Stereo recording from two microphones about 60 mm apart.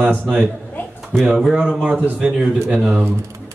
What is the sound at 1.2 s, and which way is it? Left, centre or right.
A man's voice, centre.